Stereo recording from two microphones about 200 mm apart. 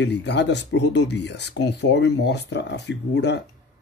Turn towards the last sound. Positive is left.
turn(degrees=60)  # may be behind; listen again after turning